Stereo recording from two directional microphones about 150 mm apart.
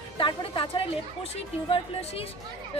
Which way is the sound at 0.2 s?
35° left (ahead or behind).